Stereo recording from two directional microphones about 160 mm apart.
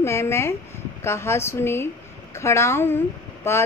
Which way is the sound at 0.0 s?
15° left (ahead or behind).